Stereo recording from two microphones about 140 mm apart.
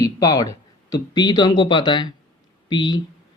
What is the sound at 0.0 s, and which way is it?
Speech, 25° left (ahead or behind).